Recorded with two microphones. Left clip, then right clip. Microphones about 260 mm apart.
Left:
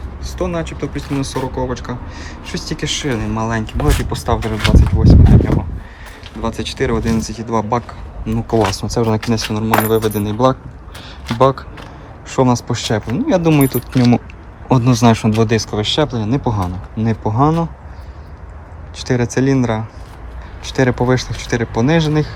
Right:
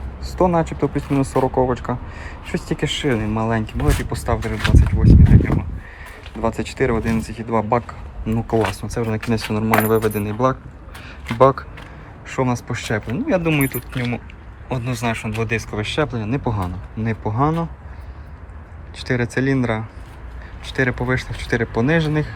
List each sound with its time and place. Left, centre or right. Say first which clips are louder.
0.7 s speech: right 2 dB; centre
6.4 s speech: left 1 dB; centre
8.8 s a man's voice: left 7 dB; centre
19.0 s speech: left 4 dB; centre